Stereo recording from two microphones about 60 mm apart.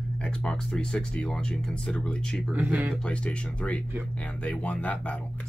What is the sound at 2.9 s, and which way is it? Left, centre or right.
Speech, centre.